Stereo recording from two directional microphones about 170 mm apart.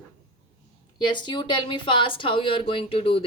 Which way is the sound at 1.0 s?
25° left (ahead or behind).